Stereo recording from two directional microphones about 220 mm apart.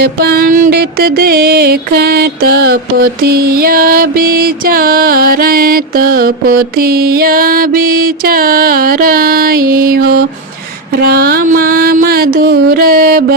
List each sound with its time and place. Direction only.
0.0 s music: 45° right (ahead or behind)